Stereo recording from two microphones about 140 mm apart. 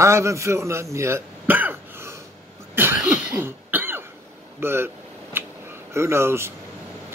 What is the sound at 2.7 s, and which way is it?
Cough, 15° right (ahead or behind).